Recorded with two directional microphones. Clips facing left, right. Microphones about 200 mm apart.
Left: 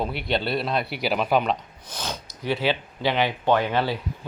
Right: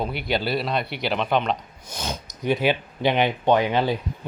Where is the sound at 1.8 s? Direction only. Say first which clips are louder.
Right 2 dB; 15° right (ahead or behind).